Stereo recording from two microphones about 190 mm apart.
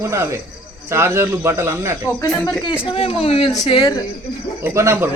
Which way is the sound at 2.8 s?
30° left (ahead or behind).